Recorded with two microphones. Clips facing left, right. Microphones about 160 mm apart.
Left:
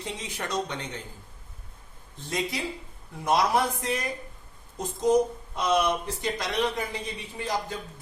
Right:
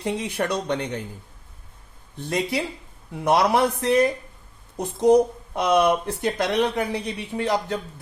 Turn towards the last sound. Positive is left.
turn(degrees=-70)  # may be behind; listen again after turning